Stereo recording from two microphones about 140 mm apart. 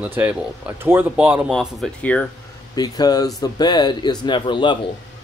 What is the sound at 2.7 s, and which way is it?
A man's voice, 30° left (ahead or behind).